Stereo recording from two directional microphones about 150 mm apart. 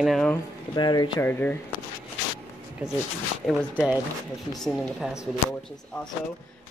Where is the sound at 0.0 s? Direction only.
Centre (ahead or behind).